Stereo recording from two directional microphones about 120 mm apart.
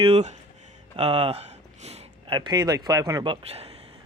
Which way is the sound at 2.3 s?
35° right (ahead or behind).